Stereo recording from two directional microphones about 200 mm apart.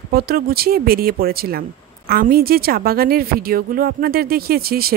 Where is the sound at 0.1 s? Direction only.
50° right (ahead or behind).